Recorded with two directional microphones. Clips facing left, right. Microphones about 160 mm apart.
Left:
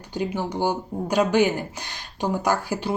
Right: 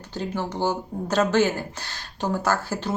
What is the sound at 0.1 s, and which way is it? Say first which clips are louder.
Speech: left 2 dB; 15° left (ahead or behind).